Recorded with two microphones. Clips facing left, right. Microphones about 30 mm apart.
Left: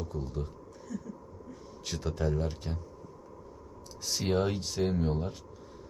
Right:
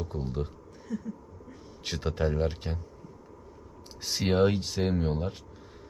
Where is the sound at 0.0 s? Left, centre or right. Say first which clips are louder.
Right 3 dB; right.